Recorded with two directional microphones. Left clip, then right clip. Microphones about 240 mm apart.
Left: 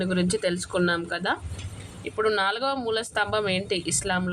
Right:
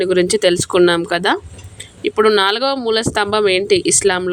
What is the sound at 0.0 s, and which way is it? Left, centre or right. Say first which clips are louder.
Speech: right 12 dB; right.